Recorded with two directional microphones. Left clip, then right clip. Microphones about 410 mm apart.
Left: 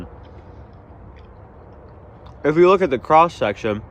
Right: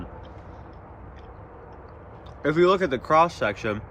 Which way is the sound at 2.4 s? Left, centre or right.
Centre.